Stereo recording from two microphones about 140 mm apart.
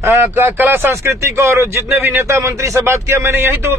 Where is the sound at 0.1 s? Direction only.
15° right (ahead or behind).